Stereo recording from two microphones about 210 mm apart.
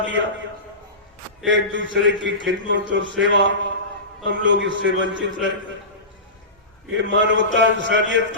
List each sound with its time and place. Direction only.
0.0 s a man's voice: 60° right (ahead or behind)
1.5 s a man's voice: 60° right (ahead or behind)
6.9 s a man's voice: 60° right (ahead or behind)